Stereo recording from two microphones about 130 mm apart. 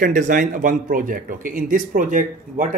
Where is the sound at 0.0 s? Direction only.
80° right.